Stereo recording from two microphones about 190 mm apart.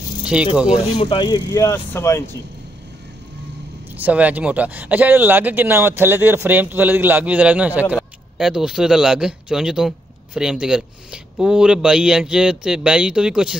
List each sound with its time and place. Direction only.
0.2 s a sound: 5° right (ahead or behind)
0.7 s speech: 25° left (ahead or behind)
4.0 s speech: 10° right (ahead or behind)